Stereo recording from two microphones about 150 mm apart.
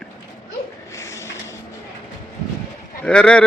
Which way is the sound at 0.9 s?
20° left (ahead or behind).